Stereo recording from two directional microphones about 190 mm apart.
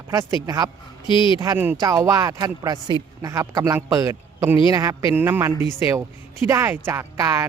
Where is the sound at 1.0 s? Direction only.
25° left (ahead or behind).